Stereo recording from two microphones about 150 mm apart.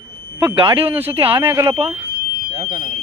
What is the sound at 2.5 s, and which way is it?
Fire alarm, 55° right (ahead or behind).